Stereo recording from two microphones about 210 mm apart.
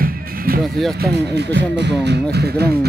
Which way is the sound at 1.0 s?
55° right (ahead or behind).